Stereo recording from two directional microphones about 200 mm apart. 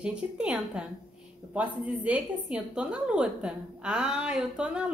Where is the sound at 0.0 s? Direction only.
5° right (ahead or behind).